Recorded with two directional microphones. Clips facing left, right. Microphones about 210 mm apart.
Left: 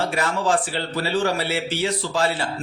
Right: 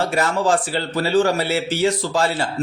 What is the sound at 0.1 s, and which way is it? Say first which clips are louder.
Speech: right 3 dB; 45° right (ahead or behind).